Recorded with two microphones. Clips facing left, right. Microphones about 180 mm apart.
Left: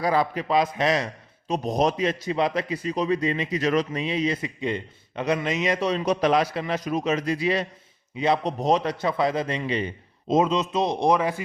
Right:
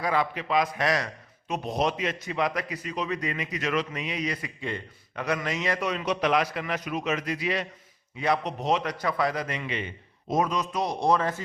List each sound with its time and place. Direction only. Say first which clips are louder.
0.0 s a man's voice: left 4 dB; 35° left (ahead or behind); by 5.8 s 20° left (ahead or behind)
5.8 s a man's voice: left 5 dB; 30° left (ahead or behind)
8.4 s a man's voice: left 4 dB; 35° left (ahead or behind)
10.2 s a man's voice: left 5 dB; 20° left (ahead or behind)